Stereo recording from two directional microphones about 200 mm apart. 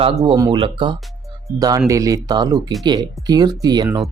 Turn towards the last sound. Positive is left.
turn(degrees=-20)  # may be behind; listen again after turning